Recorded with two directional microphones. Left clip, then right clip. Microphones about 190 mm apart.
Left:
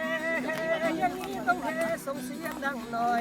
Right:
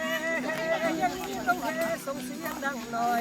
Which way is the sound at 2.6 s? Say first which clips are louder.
Even; centre (ahead or behind).